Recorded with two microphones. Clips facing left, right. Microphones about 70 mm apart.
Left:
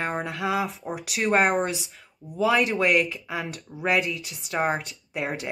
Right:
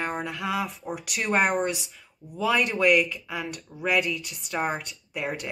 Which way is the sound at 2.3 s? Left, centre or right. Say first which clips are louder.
Left 3 dB; centre.